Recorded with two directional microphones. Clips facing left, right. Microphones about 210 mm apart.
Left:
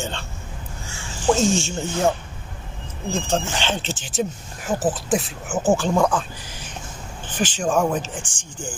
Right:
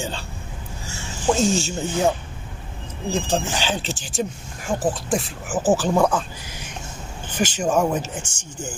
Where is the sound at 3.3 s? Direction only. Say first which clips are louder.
Even; 5° right (ahead or behind).